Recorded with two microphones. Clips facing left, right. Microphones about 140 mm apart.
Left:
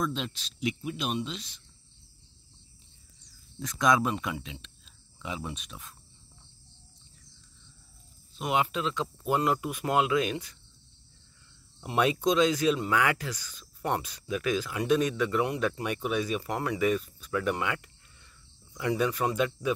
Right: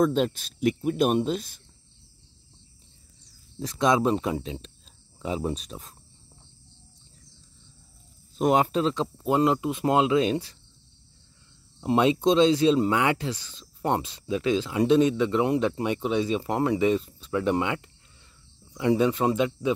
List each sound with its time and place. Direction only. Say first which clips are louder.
0.0 s speech: right 10 dB; 50° right (ahead or behind)
3.5 s speech: right 3 dB; 30° right (ahead or behind)
8.4 s speech: right 7 dB; 40° right (ahead or behind)
11.8 s speech: right 5 dB; 25° right (ahead or behind)